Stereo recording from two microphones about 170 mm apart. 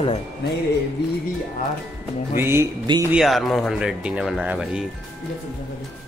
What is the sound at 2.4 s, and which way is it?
Speech, 15° right (ahead or behind).